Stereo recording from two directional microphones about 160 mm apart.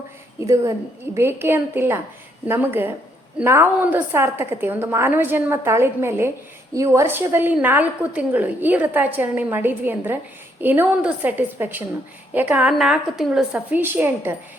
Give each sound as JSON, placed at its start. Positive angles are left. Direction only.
{"t": 0.4, "sound": "a woman's voice", "side_deg": -20}